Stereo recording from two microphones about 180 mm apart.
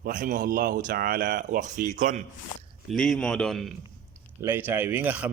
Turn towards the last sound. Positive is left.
turn(degrees=-10)  # may be behind; listen again after turning